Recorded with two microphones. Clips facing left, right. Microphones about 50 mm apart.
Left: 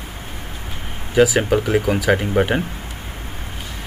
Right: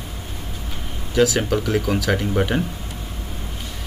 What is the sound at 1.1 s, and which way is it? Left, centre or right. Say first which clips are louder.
Speech: left 3 dB; centre.